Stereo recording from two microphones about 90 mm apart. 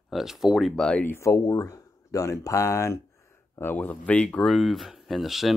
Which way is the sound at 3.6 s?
20° left (ahead or behind).